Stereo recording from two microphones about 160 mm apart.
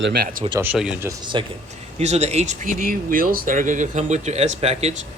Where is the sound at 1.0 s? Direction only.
30° right (ahead or behind).